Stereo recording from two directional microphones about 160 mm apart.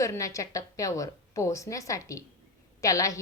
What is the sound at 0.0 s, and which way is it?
A woman's voice, 20° left (ahead or behind).